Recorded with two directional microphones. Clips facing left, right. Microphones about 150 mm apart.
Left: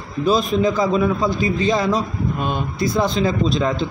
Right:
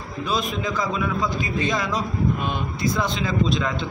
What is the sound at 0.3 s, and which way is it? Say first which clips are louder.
A man's voice: left 8 dB; 35° left (ahead or behind).